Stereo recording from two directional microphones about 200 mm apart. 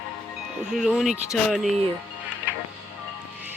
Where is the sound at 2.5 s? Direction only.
10° right (ahead or behind).